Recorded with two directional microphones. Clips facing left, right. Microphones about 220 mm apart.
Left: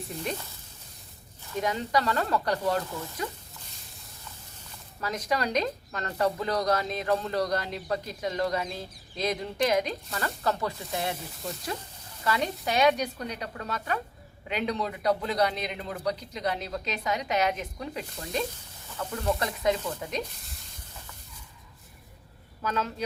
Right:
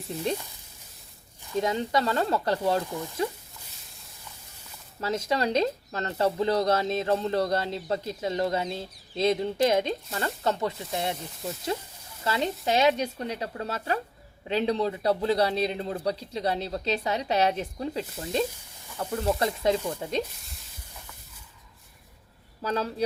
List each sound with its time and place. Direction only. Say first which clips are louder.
1.6 s speech: even; 25° right (ahead or behind)
4.9 s speech: right 3 dB; 25° right (ahead or behind)
12.2 s a man's voice: right 1 dB; 25° right (ahead or behind)
20.4 s a sound: left 1 dB; centre (ahead or behind)
22.6 s a man's voice: right 3 dB; 35° right (ahead or behind)